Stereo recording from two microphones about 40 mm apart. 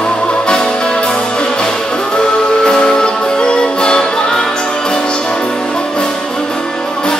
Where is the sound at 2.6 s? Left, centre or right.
Centre.